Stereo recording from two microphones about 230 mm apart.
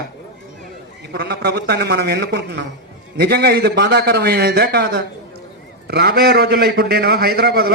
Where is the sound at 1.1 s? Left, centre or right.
Right.